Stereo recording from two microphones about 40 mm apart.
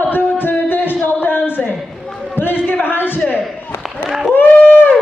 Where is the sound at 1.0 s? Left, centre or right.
Left.